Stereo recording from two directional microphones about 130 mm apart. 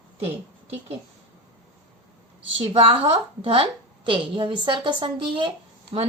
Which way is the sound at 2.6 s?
45° right (ahead or behind).